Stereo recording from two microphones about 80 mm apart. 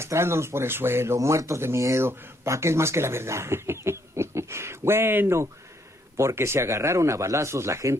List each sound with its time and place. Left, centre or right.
0.0 s speech: right